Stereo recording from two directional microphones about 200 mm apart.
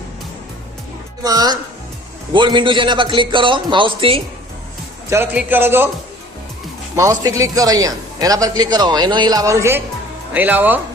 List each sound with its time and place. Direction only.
1.2 s speech: 20° right (ahead or behind)
5.0 s a man's voice: 10° right (ahead or behind)
6.9 s a man's voice: 15° right (ahead or behind)